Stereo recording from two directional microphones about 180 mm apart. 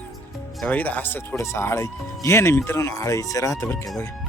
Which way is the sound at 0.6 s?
10° left (ahead or behind).